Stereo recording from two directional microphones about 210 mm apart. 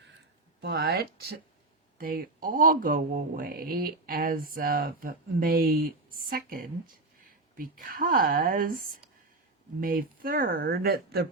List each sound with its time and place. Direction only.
0.6 s speech: 50° right (ahead or behind)